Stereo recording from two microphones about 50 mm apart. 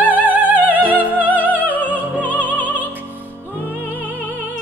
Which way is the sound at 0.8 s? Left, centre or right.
Right.